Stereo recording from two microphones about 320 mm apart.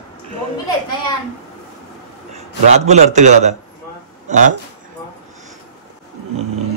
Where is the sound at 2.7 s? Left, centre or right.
Right.